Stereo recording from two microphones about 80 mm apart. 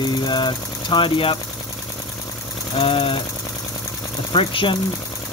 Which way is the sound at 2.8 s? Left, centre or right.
Left.